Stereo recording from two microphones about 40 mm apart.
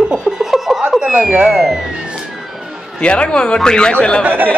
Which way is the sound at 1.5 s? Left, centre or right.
Centre.